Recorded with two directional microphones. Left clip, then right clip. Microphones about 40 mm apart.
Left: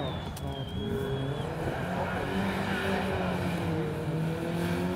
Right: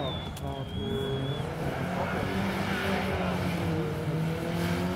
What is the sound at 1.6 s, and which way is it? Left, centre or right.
Vehicle, right.